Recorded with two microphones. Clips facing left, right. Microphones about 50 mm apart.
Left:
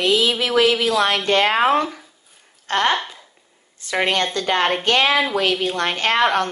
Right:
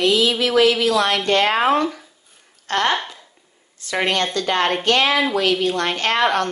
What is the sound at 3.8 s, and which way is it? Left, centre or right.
Speech, left.